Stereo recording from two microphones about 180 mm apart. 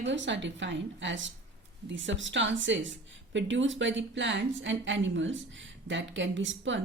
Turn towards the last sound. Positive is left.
turn(degrees=-90)